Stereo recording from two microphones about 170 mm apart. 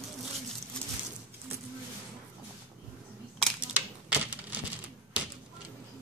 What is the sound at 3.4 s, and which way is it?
Coin, 5° right (ahead or behind).